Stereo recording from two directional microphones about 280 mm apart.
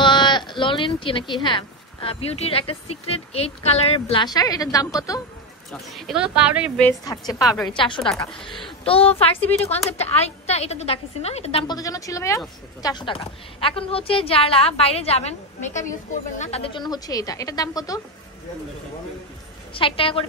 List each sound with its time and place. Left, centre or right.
0.0 s speech: centre
5.7 s speech: centre
6.9 s speech: centre
7.3 s speech: centre
7.7 s speech: centre
8.0 s speech: centre
8.8 s a woman's voice: centre
19.7 s a woman's voice: centre